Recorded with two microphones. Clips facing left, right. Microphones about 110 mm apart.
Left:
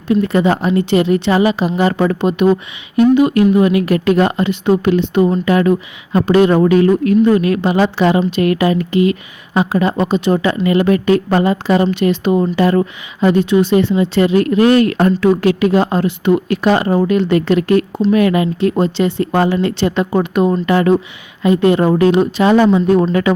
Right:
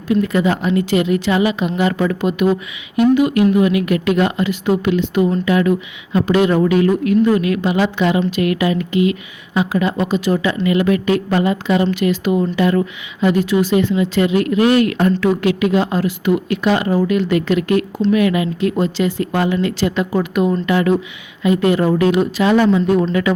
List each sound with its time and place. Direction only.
0.1 s a woman's voice: 35° left (ahead or behind)
10.4 s a woman's voice: 40° left (ahead or behind)
16.0 s speech: 30° left (ahead or behind)
16.5 s a woman's voice: 40° left (ahead or behind)